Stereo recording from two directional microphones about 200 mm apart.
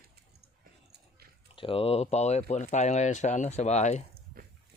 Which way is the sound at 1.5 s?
25° left (ahead or behind).